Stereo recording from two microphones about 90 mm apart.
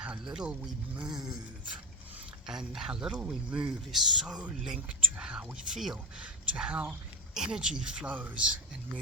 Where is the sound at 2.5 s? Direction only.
5° right (ahead or behind).